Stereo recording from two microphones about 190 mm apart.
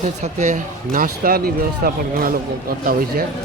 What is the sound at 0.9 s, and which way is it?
A man's voice, 50° right (ahead or behind).